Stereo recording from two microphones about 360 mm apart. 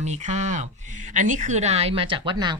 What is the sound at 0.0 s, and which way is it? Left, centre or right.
Speech, centre.